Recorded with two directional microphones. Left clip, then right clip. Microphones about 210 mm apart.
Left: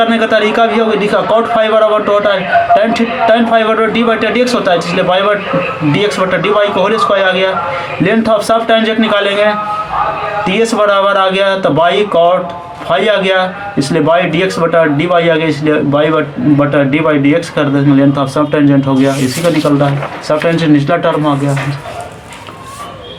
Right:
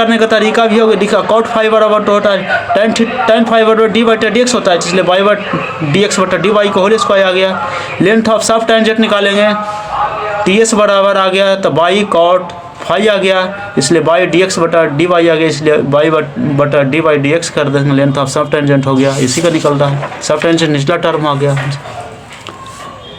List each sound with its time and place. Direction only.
0.0 s speech: 45° right (ahead or behind)
20.2 s speech: 45° right (ahead or behind)